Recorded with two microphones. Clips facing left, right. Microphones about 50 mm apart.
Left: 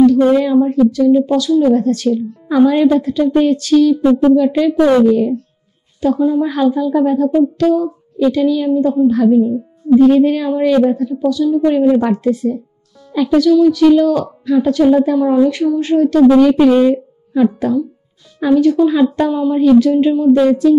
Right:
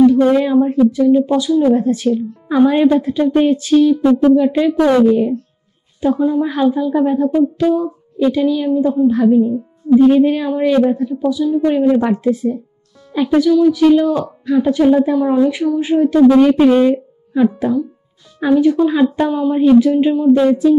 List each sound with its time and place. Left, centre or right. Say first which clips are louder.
0.0 s speech: left 1 dB; right
5.0 s speech: left 1 dB; centre
11.8 s speech: left 1 dB; centre
13.1 s speech: left 2 dB; centre